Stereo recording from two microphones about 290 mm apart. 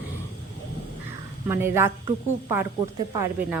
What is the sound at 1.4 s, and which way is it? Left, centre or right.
A woman's voice, centre.